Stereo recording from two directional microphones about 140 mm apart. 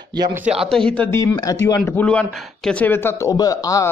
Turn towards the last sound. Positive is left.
turn(degrees=25)  # may be behind; listen again after turning